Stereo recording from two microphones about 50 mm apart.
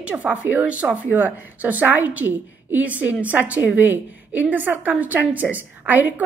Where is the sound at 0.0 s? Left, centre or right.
Right.